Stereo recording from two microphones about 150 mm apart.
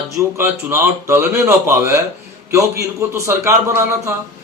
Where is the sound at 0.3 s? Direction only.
15° right (ahead or behind).